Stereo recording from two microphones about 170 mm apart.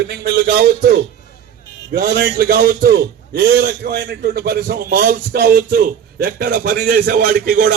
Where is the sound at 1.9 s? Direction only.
70° right (ahead or behind).